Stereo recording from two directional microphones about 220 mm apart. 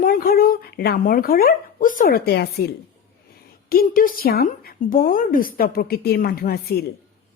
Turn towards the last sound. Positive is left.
turn(degrees=40)  # may be behind; listen again after turning